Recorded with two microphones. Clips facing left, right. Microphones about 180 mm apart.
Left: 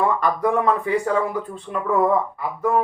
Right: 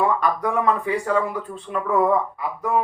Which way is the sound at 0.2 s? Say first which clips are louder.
Left 2 dB; centre (ahead or behind).